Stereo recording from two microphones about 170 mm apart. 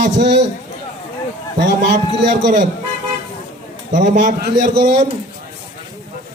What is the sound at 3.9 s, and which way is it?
Speech, 45° right (ahead or behind).